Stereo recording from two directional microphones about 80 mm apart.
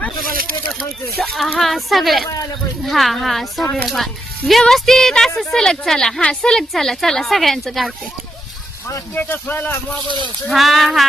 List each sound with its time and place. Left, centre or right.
1.2 s a woman's voice: centre
9.1 s speech: left
10.5 s a woman's voice: centre